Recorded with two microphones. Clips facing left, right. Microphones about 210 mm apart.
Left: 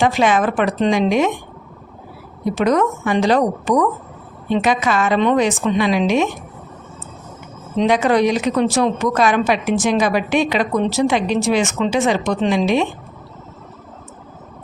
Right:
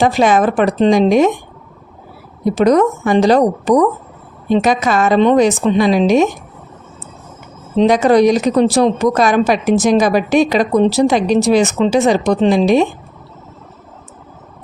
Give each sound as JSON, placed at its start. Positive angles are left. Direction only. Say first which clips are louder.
{"t": 0.0, "sound": "a woman's voice", "louder": "right 4 dB", "side_deg": -40}
{"t": 2.4, "sound": "a woman's voice", "louder": "right 5 dB", "side_deg": -35}
{"t": 7.8, "sound": "a woman's voice", "louder": "right 5 dB", "side_deg": -40}